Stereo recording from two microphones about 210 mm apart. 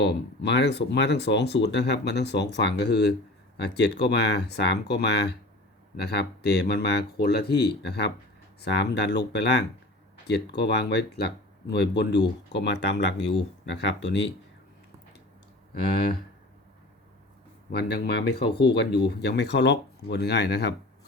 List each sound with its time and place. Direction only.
0.0 s speech: 55° left (ahead or behind)
17.7 s speech: 50° left (ahead or behind)